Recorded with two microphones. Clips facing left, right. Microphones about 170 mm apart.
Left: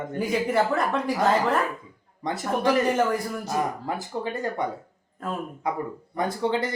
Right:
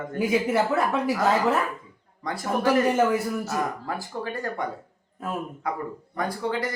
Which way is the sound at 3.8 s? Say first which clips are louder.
Left 2 dB; 20° left (ahead or behind).